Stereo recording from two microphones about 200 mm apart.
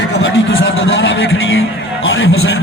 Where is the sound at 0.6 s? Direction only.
70° left (ahead or behind).